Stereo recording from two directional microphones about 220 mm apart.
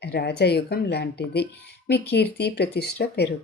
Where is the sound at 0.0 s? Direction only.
50° left (ahead or behind).